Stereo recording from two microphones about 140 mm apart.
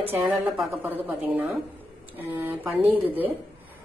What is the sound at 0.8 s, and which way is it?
A woman's voice, 15° right (ahead or behind).